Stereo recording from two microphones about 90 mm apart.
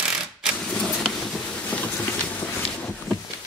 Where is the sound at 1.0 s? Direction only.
10° left (ahead or behind).